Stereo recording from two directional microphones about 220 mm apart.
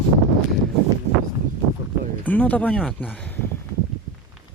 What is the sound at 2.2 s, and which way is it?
Speech, 5° left (ahead or behind).